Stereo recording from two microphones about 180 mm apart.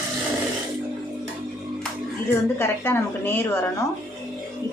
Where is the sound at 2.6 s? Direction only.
10° left (ahead or behind).